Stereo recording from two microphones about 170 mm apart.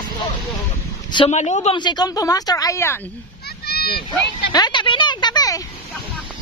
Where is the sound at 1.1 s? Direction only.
40° left (ahead or behind).